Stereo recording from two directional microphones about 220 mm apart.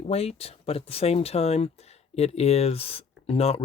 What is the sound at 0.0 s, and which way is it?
Speech, 30° left (ahead or behind).